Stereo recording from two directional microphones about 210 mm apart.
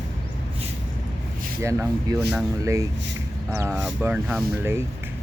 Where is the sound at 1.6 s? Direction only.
10° right (ahead or behind).